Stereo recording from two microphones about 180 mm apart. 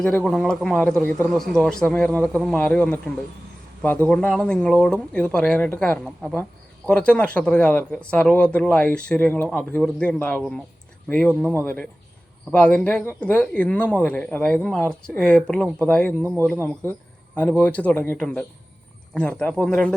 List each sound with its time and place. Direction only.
0.2 s speech: centre (ahead or behind)
4.1 s speech: 5° left (ahead or behind)